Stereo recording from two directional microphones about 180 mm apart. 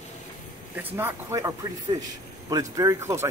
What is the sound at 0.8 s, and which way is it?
Speech, 10° right (ahead or behind).